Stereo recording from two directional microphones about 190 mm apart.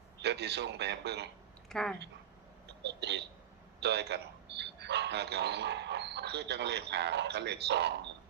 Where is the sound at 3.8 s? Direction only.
60° right (ahead or behind).